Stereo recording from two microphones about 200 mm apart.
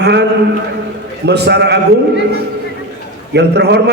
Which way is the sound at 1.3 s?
55° right (ahead or behind).